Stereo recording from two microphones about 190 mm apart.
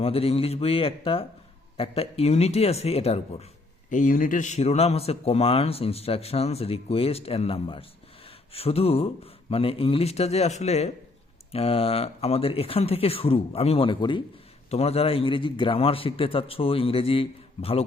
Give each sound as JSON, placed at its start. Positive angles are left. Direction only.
{"t": 0.0, "sound": "a man's voice", "side_deg": 30}